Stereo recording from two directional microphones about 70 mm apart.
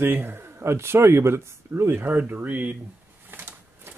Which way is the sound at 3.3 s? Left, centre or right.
Right.